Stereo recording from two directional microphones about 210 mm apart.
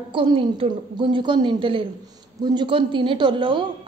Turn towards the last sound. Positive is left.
turn(degrees=-25)  # may be behind; listen again after turning